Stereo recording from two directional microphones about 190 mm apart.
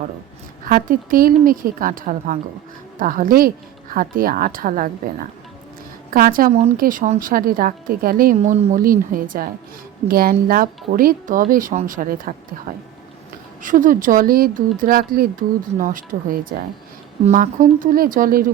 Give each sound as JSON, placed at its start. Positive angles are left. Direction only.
{"t": 0.6, "sound": "speech", "side_deg": -45}
{"t": 6.1, "sound": "speech", "side_deg": -50}